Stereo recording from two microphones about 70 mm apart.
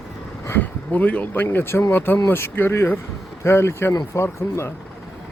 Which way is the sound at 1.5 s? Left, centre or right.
Left.